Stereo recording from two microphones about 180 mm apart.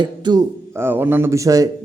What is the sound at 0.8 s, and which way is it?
Speech, 10° right (ahead or behind).